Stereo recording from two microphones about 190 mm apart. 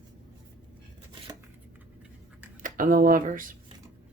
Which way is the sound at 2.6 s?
45° right (ahead or behind).